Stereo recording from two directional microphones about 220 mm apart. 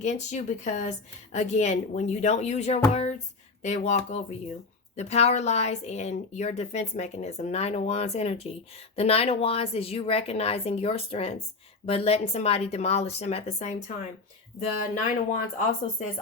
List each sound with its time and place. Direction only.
0.0 s a woman's voice: 30° left (ahead or behind)
15.0 s speech: 35° left (ahead or behind)